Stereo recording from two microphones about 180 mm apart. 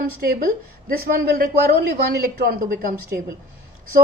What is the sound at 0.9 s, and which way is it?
Speech, 55° right (ahead or behind).